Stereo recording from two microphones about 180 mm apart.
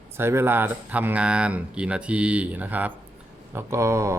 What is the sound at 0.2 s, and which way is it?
Speech, 15° right (ahead or behind).